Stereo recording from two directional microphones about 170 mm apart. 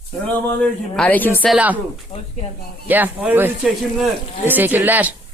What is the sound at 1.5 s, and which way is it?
Speech, 10° right (ahead or behind).